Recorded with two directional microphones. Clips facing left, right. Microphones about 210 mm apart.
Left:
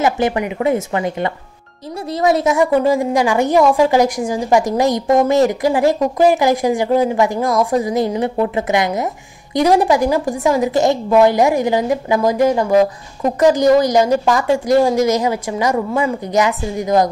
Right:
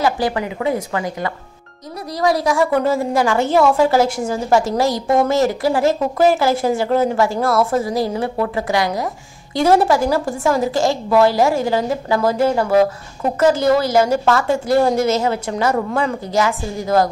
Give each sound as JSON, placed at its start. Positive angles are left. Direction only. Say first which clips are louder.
{"t": 0.0, "sound": "a woman's voice", "louder": "left 2 dB", "side_deg": 20}